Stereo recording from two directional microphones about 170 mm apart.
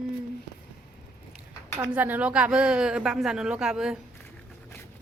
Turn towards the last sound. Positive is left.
turn(degrees=-5)  # may be behind; listen again after turning